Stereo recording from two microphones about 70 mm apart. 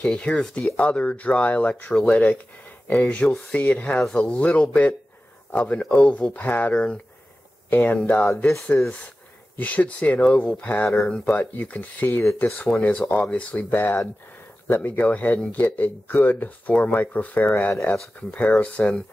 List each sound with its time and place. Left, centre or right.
0.0 s speech: centre
7.7 s speech: left
12.1 s speech: left
12.7 s speech: centre
13.7 s speech: left